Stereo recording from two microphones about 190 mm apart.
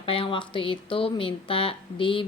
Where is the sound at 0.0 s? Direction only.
25° left (ahead or behind).